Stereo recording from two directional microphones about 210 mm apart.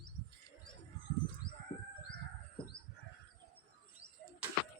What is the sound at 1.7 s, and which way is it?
Bird, 15° left (ahead or behind).